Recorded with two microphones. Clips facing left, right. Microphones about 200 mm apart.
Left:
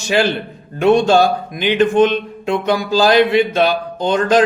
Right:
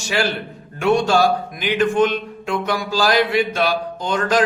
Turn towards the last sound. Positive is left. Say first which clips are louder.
# left 5 dB
turn(degrees=25)  # may be behind; listen again after turning